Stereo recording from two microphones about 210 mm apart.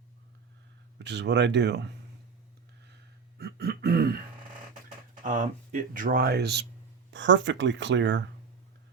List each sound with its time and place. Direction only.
0.9 s speech: 55° right (ahead or behind)
3.3 s throat clearing: 45° right (ahead or behind)
5.2 s speech: 40° right (ahead or behind); by 8.2 s 60° right (ahead or behind)